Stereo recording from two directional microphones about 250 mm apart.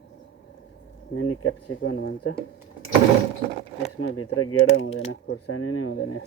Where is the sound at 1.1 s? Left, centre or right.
Left.